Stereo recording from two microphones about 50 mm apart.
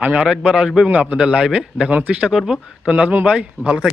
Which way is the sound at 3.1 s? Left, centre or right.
Right.